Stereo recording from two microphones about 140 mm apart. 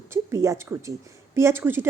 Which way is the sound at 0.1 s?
20° right (ahead or behind).